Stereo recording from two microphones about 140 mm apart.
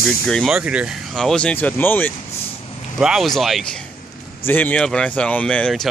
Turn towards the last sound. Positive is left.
turn(degrees=5)  # may be behind; listen again after turning